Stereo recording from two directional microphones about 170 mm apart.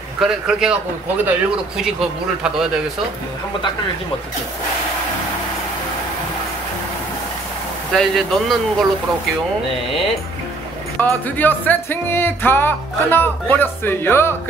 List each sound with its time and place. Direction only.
0.2 s speech: 5° right (ahead or behind)
1.8 s speech: 5° right (ahead or behind)
7.9 s speech: centre (ahead or behind)
9.8 s speech: 35° left (ahead or behind)
11.0 s speech: 10° left (ahead or behind)